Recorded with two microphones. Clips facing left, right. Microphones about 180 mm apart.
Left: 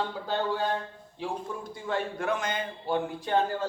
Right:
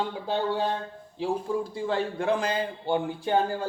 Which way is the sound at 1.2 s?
30° right (ahead or behind).